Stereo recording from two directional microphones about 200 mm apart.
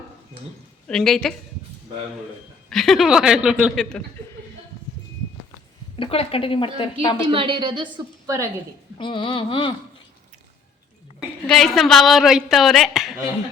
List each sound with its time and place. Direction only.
0.9 s speech: centre (ahead or behind)
2.6 s speech: centre (ahead or behind)
6.0 s a woman's voice: 30° left (ahead or behind)
7.3 s a woman's voice: 25° right (ahead or behind)
9.0 s a woman's voice: 25° left (ahead or behind)
11.4 s speech: centre (ahead or behind)